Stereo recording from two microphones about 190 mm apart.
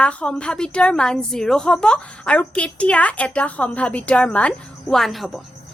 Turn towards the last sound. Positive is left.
turn(degrees=0)  # may be behind; listen again after turning